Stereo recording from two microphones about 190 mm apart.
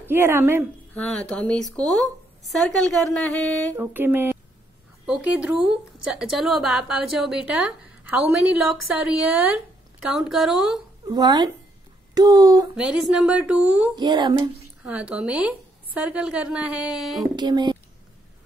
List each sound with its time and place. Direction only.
0.0 s speech: 10° right (ahead or behind)
0.9 s a woman's voice: 5° left (ahead or behind)
3.7 s a woman's voice: 10° right (ahead or behind)
10.0 s a woman's voice: centre (ahead or behind)
11.1 s speech: 20° right (ahead or behind)
12.7 s a woman's voice: 5° right (ahead or behind)
13.9 s speech: 25° right (ahead or behind)
14.9 s a woman's voice: 5° right (ahead or behind)
17.4 s speech: 20° right (ahead or behind)